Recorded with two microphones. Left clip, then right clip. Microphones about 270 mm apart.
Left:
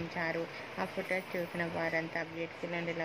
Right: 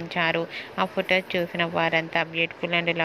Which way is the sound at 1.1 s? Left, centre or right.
Right.